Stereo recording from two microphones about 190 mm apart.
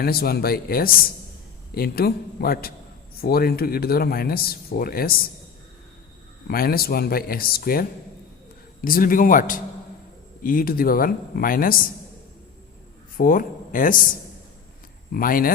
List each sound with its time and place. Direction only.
0.0 s speech: 55° left (ahead or behind)
6.5 s speech: 50° left (ahead or behind)
13.1 s speech: 45° left (ahead or behind)
15.1 s speech: 50° left (ahead or behind)